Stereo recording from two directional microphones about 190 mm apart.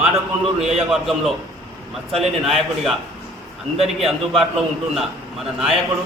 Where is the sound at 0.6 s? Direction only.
Centre (ahead or behind).